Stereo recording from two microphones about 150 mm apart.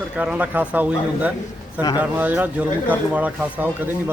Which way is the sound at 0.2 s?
10° right (ahead or behind).